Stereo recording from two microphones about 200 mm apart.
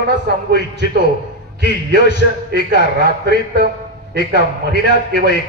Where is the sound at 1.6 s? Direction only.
60° right (ahead or behind).